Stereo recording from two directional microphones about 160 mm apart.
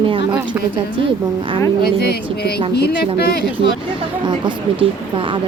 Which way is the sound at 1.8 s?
85° left.